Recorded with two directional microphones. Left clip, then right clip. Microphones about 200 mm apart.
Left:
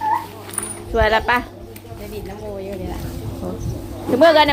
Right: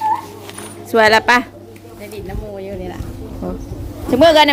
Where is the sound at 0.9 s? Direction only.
50° right (ahead or behind).